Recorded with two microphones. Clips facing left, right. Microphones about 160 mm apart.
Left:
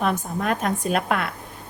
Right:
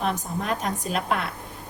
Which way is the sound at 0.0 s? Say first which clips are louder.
Left 3 dB; 55° left (ahead or behind).